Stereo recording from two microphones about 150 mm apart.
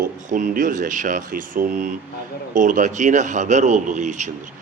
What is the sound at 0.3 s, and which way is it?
A man's voice, 60° right (ahead or behind).